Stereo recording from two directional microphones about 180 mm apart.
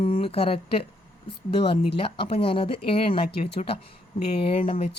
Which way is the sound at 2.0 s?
30° left (ahead or behind).